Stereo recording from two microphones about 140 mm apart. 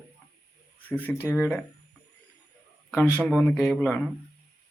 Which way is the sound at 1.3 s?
10° right (ahead or behind).